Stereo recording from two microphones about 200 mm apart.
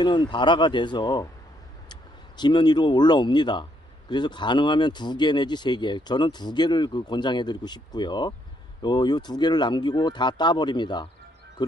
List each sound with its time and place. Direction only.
0.0 s speech: 20° left (ahead or behind)